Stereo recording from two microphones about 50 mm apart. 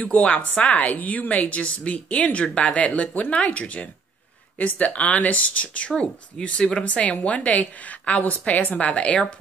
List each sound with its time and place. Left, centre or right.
0.0 s speech: left